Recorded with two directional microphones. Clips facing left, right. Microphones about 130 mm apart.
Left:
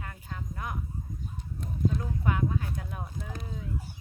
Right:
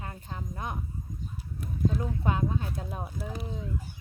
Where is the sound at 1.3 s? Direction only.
5° right (ahead or behind).